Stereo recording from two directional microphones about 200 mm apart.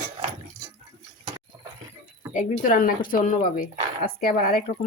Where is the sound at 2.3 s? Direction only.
40° left (ahead or behind).